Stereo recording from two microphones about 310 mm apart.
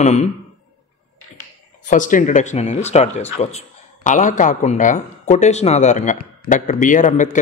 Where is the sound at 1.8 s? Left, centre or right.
Left.